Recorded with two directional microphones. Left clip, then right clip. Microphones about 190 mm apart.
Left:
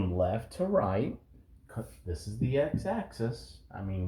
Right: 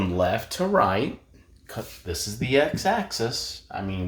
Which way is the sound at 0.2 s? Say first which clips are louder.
Right 6 dB; 15° right (ahead or behind).